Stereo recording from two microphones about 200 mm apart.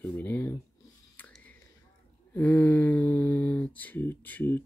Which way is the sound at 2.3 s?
10° left (ahead or behind).